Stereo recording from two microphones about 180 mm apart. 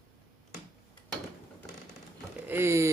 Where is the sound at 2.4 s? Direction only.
15° right (ahead or behind).